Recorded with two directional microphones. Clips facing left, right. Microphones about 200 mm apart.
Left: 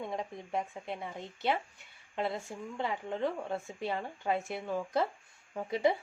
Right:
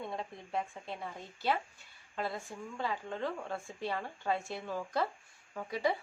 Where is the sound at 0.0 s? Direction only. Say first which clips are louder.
Left 3 dB; 20° left (ahead or behind).